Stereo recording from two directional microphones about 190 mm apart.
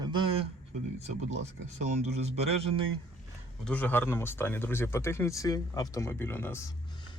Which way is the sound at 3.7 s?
10° left (ahead or behind).